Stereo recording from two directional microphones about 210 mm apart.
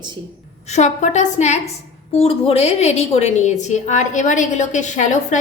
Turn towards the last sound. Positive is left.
turn(degrees=35)  # may be behind; listen again after turning